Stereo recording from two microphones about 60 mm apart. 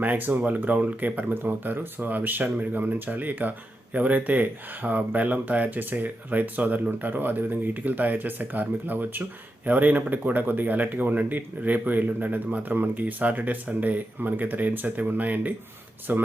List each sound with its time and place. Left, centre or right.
0.0 s speech: right